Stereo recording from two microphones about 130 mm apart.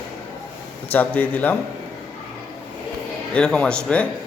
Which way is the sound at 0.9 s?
10° left (ahead or behind).